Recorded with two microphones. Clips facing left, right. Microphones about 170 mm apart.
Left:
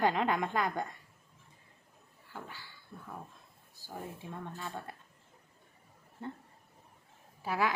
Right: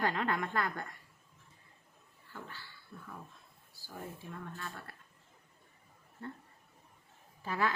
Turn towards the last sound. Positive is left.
turn(degrees=10)  # may be behind; listen again after turning